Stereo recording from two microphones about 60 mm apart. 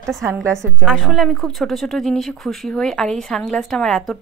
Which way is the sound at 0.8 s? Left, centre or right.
Centre.